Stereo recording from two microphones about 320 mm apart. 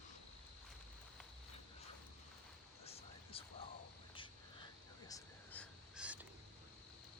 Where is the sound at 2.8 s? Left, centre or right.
Centre.